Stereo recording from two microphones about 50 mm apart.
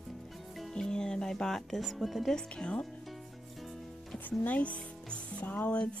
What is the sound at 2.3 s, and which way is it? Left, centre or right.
Speech, left.